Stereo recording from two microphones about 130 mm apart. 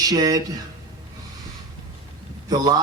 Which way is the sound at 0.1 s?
30° right (ahead or behind).